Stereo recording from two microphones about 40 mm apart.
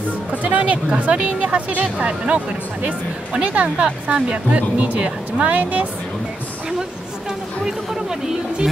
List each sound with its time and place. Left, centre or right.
0.3 s music: right
0.9 s speech: right
6.8 s speech: centre